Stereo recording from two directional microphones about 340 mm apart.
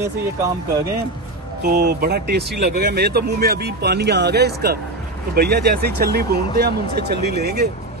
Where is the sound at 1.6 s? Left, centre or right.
Right.